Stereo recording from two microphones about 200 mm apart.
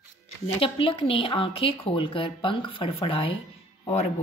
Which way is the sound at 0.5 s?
25° left (ahead or behind).